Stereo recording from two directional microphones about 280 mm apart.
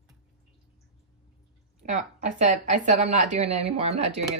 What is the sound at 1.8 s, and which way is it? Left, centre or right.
A woman's voice, right.